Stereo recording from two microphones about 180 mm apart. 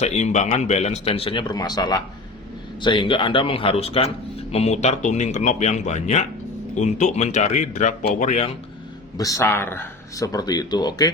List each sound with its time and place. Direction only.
0.0 s speech: 40° left (ahead or behind)
9.1 s speech: 20° left (ahead or behind)